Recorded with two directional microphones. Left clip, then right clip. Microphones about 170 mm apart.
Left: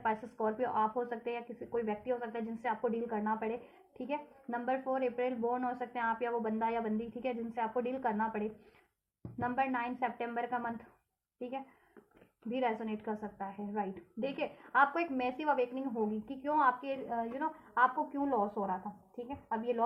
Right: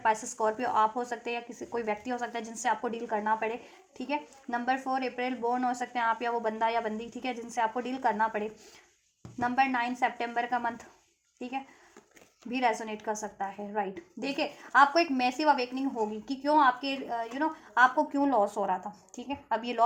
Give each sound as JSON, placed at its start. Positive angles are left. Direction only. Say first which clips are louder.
{"t": 0.0, "sound": "speech", "louder": "right 7 dB", "side_deg": -30}